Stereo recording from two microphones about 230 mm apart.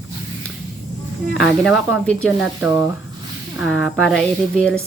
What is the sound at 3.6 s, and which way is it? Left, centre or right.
Speech, centre.